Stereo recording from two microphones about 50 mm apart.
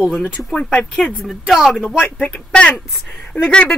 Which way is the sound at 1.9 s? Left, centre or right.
Left.